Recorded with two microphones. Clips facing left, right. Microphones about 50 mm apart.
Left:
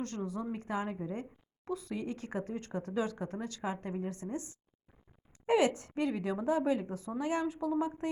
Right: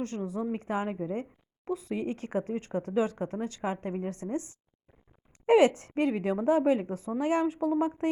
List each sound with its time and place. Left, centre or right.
0.0 s speech: centre
2.0 s a woman's voice: right